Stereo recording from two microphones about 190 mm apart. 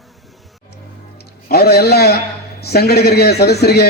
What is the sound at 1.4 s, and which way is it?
A man's voice, 55° left (ahead or behind).